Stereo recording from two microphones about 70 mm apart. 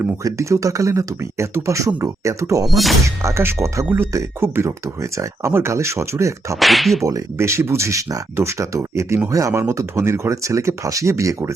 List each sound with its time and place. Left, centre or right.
0.2 s speech: right
2.6 s whip: centre
3.2 s speech: right
3.8 s a man's voice: right
6.6 s whip: centre
7.0 s speech: right